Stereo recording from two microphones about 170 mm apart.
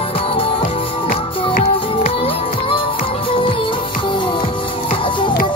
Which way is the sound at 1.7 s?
35° left (ahead or behind).